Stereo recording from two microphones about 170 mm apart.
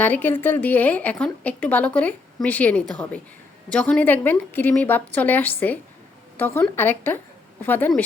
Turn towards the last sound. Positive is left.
turn(degrees=10)  # may be behind; listen again after turning